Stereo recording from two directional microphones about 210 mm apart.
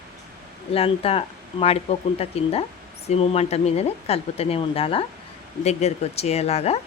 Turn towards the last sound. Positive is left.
turn(degrees=30)  # may be behind; listen again after turning